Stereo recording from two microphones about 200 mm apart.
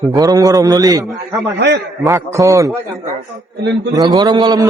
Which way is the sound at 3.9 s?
15° right (ahead or behind).